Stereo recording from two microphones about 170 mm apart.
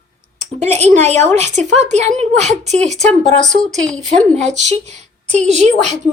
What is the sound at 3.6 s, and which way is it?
Speech, 5° left (ahead or behind).